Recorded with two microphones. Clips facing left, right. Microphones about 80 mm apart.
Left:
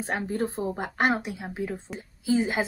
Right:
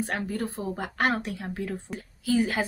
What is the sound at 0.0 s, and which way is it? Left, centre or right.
A woman's voice, left.